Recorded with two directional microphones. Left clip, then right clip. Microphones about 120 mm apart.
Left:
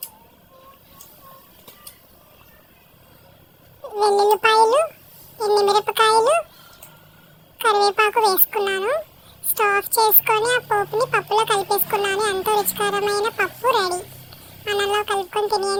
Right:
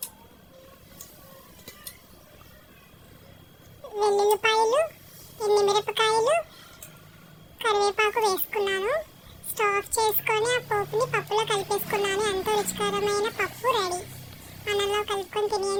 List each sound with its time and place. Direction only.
3.8 s a sound: 35° left (ahead or behind)
5.4 s speech: 35° left (ahead or behind)
7.6 s speech: 35° left (ahead or behind)